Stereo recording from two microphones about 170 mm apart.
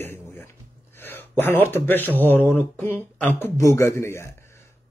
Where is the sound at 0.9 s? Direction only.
10° left (ahead or behind).